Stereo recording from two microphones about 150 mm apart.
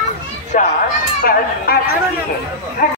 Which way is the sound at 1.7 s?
90° left.